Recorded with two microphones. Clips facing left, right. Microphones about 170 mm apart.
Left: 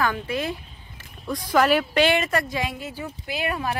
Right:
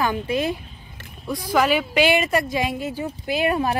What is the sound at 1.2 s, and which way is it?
Speech, 5° right (ahead or behind).